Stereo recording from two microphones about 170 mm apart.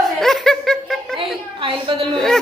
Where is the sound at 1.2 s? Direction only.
30° right (ahead or behind).